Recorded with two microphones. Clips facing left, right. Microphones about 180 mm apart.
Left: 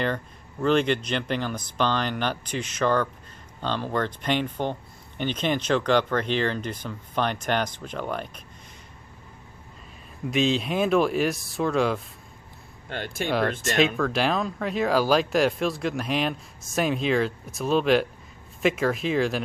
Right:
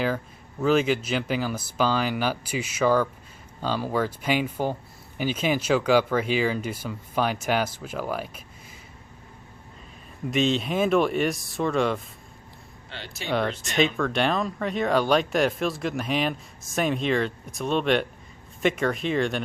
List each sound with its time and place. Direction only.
0.6 s speech: 5° right (ahead or behind)
10.3 s speech: centre (ahead or behind)
12.9 s speech: 50° left (ahead or behind)
13.6 s speech: centre (ahead or behind)